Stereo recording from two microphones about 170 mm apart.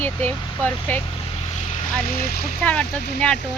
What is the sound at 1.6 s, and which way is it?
Vehicle, 45° left (ahead or behind).